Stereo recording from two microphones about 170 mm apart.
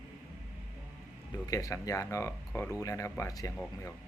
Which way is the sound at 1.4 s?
20° left (ahead or behind).